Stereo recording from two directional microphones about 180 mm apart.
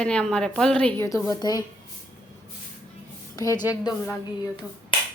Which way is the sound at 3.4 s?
20° left (ahead or behind).